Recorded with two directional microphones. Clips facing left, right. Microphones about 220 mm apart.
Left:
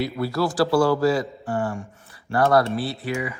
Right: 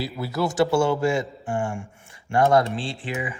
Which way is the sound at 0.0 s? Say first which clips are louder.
Left 3 dB; 20° right (ahead or behind).